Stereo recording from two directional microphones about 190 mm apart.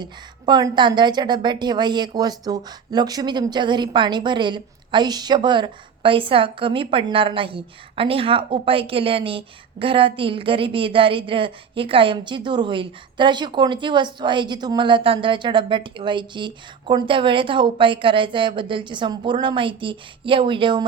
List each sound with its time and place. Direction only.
0.0 s a woman's voice: 25° right (ahead or behind)